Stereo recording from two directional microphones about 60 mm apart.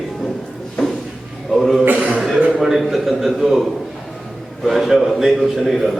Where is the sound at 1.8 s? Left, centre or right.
Right.